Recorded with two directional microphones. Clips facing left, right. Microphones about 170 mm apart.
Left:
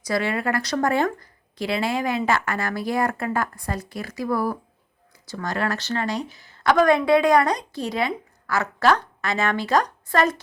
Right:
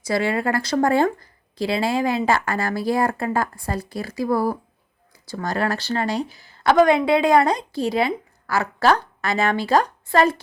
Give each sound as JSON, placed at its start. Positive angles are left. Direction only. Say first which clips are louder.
{"t": 0.0, "sound": "a woman's voice", "louder": "right 2 dB", "side_deg": -30}